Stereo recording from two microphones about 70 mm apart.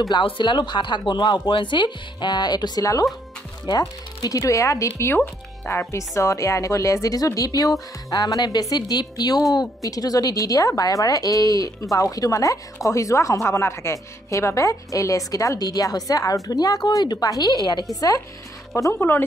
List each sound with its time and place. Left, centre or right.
0.1 s speech: left
2.8 s speech: left
3.6 s speech: left
8.1 s a woman's voice: left
9.8 s a woman's voice: left
18.9 s speech: left